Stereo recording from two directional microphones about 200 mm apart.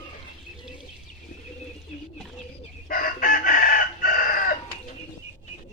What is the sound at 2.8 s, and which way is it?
Chicken, 45° left (ahead or behind).